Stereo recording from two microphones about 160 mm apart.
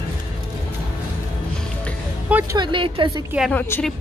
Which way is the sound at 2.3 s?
10° right (ahead or behind).